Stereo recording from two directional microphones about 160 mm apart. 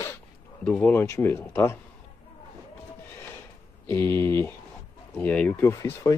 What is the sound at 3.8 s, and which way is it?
Speech, 10° left (ahead or behind).